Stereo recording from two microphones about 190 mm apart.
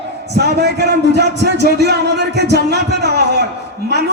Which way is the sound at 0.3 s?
60° right (ahead or behind).